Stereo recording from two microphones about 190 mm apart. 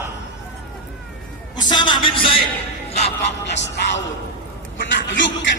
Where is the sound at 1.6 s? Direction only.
25° left (ahead or behind).